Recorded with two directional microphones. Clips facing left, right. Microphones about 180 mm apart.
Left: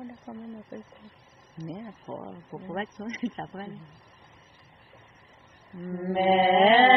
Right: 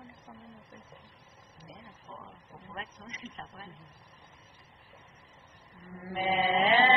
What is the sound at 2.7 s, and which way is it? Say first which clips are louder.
Speech: left 11 dB; 45° left (ahead or behind).